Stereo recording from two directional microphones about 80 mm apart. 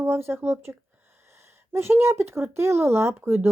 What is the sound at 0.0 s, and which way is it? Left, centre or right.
Speech, right.